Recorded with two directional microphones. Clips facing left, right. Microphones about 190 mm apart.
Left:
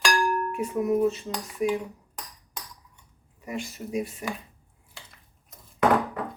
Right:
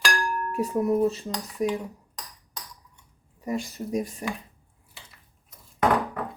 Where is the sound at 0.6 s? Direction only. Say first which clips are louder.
Right 2 dB; 35° right (ahead or behind).